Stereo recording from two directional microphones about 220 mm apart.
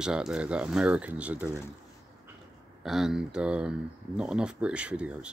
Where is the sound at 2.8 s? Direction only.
Centre (ahead or behind).